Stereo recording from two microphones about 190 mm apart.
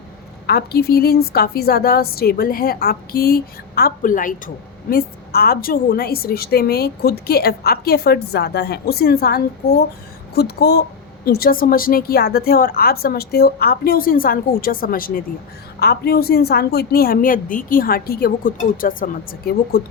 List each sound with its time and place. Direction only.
0.4 s a woman's voice: 55° left (ahead or behind)